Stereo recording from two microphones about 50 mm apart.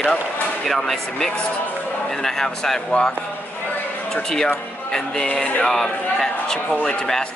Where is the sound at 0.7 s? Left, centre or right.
Centre.